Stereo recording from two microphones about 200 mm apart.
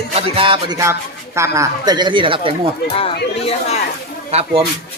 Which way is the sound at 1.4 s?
15° right (ahead or behind).